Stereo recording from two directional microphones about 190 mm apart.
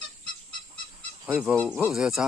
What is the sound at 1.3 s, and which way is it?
Fowl, 5° right (ahead or behind).